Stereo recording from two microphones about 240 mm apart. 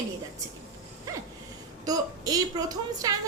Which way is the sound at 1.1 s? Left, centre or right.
Centre.